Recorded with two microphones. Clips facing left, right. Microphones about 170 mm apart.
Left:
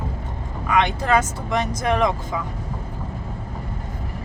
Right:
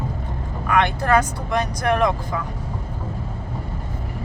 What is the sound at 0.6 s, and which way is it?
Speech, 20° left (ahead or behind).